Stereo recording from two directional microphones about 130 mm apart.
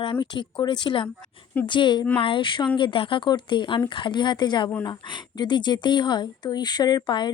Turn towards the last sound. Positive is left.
turn(degrees=35)  # may be behind; listen again after turning